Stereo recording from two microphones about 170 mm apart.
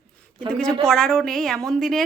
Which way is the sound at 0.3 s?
5° left (ahead or behind).